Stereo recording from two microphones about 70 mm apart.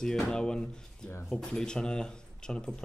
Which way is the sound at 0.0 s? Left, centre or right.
Centre.